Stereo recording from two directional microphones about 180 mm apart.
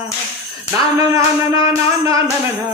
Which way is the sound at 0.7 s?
20° right (ahead or behind).